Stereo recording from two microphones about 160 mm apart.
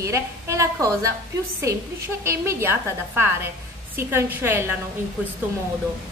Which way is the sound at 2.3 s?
15° right (ahead or behind).